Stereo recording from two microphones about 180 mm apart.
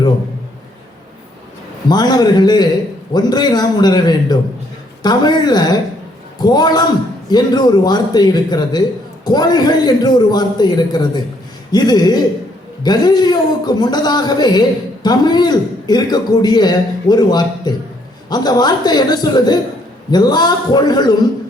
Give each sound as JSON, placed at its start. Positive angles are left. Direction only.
{"t": 1.9, "sound": "a man's voice", "side_deg": 20}